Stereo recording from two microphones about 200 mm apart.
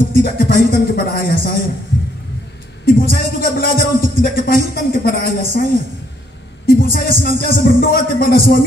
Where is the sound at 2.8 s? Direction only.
45° left (ahead or behind).